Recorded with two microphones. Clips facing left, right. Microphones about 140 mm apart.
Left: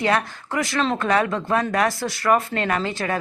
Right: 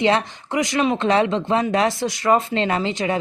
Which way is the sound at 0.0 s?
20° right (ahead or behind).